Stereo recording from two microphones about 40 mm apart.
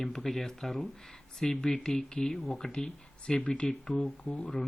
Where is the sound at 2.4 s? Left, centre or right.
Centre.